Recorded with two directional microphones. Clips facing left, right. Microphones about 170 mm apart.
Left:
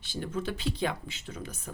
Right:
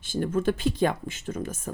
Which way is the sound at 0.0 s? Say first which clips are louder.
Right 9 dB; 50° right (ahead or behind).